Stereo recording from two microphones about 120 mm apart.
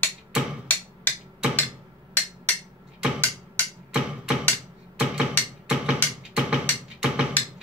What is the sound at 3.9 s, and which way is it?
Music, 5° right (ahead or behind).